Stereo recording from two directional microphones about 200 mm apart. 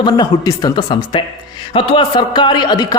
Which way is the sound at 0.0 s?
20° left (ahead or behind).